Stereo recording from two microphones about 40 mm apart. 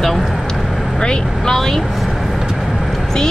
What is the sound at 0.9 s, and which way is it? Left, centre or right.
Speech, centre.